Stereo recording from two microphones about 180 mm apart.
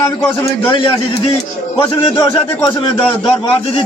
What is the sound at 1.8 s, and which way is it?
A man's voice, 30° left (ahead or behind).